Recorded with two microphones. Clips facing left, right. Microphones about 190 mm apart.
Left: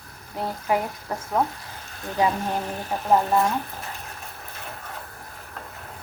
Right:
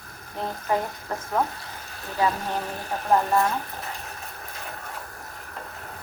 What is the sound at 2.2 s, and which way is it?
Speech, 15° left (ahead or behind).